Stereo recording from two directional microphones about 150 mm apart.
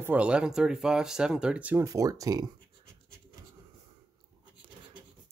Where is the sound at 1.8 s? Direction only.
20° right (ahead or behind).